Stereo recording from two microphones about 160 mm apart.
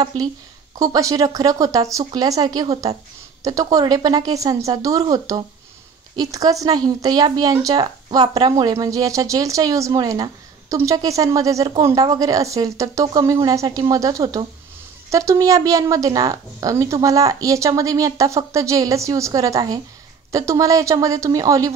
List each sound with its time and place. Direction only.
0.7 s a woman's voice: 20° right (ahead or behind)